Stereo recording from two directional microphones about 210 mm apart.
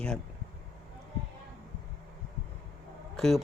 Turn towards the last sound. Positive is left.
turn(degrees=0)  # may be behind; listen again after turning